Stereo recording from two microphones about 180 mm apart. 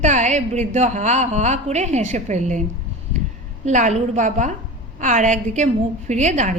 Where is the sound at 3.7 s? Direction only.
40° right (ahead or behind).